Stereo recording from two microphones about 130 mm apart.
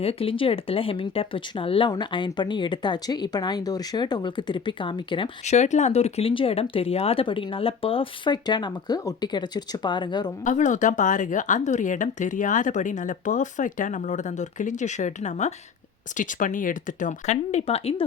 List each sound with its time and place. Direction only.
0.0 s speech: 50° left (ahead or behind)
5.5 s speech: 60° left (ahead or behind); by 10.3 s 35° left (ahead or behind)
10.4 s speech: 70° left (ahead or behind)
16.1 s speech: 80° left; by 18.0 s 50° left (ahead or behind)